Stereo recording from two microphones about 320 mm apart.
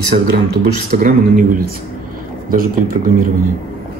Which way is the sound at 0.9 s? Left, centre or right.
Right.